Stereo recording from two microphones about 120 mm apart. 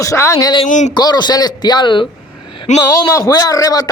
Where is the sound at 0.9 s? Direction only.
35° left (ahead or behind).